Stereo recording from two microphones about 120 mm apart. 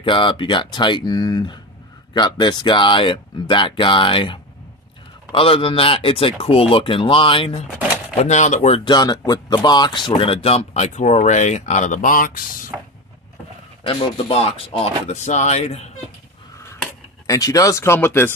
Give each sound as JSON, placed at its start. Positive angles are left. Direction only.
{"t": 0.0, "sound": "speech", "side_deg": 45}
{"t": 8.2, "sound": "speech", "side_deg": 80}
{"t": 8.8, "sound": "speech", "side_deg": 35}
{"t": 13.8, "sound": "speech", "side_deg": 55}
{"t": 17.3, "sound": "speech", "side_deg": 30}